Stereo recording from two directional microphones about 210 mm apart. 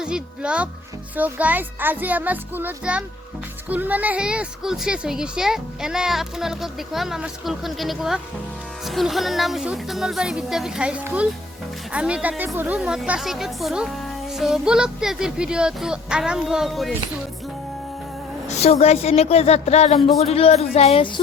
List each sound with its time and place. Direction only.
0.0 s a child's voice: 5° right (ahead or behind)
18.4 s speech: 30° left (ahead or behind)